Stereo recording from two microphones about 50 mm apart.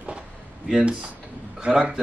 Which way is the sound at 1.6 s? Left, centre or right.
Centre.